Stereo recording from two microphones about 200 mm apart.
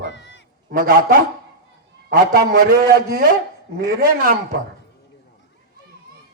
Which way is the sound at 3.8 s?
45° right (ahead or behind).